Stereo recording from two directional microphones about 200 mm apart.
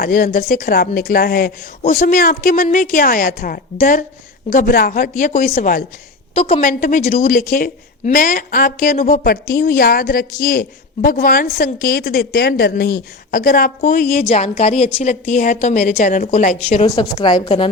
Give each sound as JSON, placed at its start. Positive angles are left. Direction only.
{"t": 0.0, "sound": "a woman's voice", "side_deg": 45}
{"t": 14.3, "sound": "a woman's voice", "side_deg": 30}